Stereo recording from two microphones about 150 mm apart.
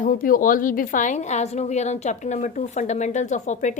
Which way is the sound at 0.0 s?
65° left (ahead or behind).